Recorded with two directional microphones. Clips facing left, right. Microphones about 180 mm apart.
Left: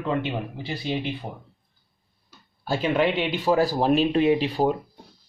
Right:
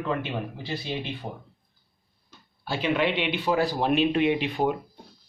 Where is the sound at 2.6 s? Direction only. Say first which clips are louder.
Left 3 dB; 45° left (ahead or behind).